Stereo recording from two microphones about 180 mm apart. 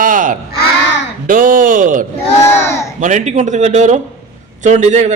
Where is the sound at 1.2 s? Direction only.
50° right (ahead or behind).